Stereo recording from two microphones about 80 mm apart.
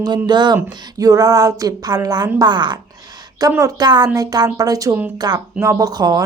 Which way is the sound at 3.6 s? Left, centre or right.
Right.